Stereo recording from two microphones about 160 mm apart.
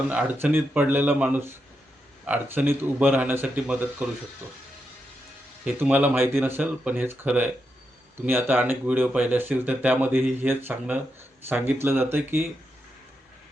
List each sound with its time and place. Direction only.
0.1 s speech: 10° right (ahead or behind)
5.6 s speech: 10° right (ahead or behind)